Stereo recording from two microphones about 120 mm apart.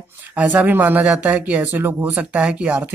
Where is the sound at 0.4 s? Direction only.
15° right (ahead or behind).